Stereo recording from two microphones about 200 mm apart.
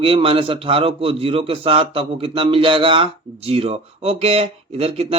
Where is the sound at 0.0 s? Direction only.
25° right (ahead or behind).